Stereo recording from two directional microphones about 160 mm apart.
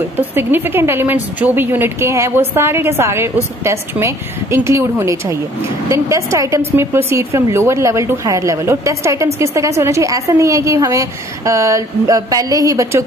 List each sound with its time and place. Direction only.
0.4 s a woman's voice: 15° right (ahead or behind)